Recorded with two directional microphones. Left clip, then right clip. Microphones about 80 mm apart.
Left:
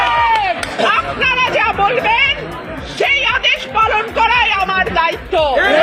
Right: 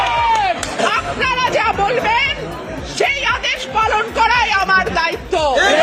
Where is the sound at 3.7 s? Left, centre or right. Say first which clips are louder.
Left 2 dB; right.